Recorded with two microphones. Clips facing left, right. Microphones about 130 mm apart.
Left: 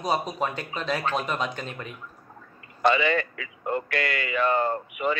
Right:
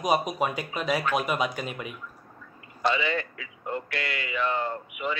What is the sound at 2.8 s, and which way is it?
Speech, 55° left (ahead or behind).